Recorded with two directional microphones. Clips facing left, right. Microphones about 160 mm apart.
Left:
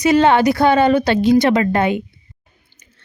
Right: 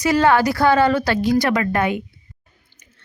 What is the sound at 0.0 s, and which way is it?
Speech, 20° left (ahead or behind).